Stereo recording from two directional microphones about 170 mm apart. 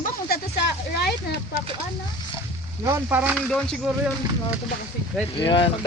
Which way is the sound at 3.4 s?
5° left (ahead or behind).